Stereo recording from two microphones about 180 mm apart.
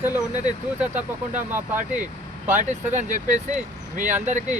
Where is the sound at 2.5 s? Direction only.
40° right (ahead or behind).